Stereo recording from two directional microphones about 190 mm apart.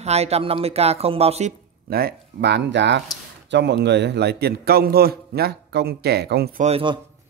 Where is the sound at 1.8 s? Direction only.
55° right (ahead or behind).